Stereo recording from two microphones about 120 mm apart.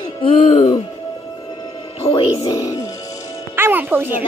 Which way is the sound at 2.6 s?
30° left (ahead or behind).